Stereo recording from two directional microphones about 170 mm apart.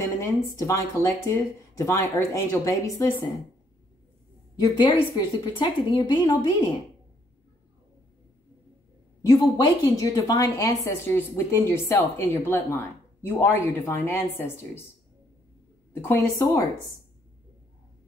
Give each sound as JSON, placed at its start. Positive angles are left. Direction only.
{"t": 0.0, "sound": "a woman's voice", "side_deg": 20}
{"t": 4.6, "sound": "a woman's voice", "side_deg": 30}
{"t": 9.3, "sound": "a woman's voice", "side_deg": 20}
{"t": 15.9, "sound": "a woman's voice", "side_deg": 15}